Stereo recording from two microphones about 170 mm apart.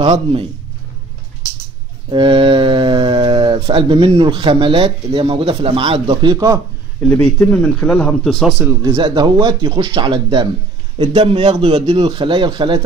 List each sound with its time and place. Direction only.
0.1 s a man's voice: 35° right (ahead or behind)
2.0 s speech: 30° right (ahead or behind)
6.3 s speech: 20° right (ahead or behind)
7.1 s speech: 10° left (ahead or behind)
8.5 s speech: 15° right (ahead or behind)
8.9 s speech: 25° right (ahead or behind)